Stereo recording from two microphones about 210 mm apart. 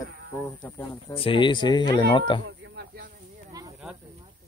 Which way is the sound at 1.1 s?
25° left (ahead or behind).